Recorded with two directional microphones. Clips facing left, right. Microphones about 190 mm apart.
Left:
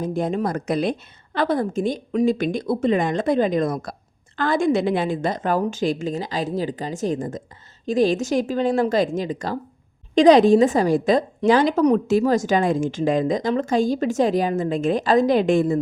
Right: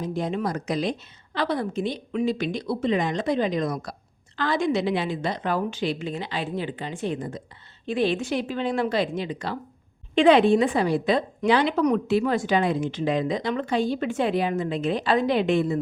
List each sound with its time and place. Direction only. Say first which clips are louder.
0.0 s a woman's voice: left 4 dB; 50° left (ahead or behind)